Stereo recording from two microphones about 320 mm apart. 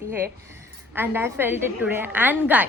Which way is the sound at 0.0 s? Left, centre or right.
Centre.